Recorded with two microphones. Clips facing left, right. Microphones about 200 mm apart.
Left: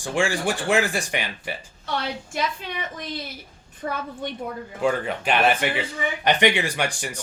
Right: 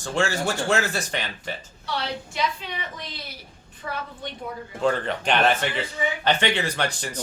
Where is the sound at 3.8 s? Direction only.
45° left (ahead or behind).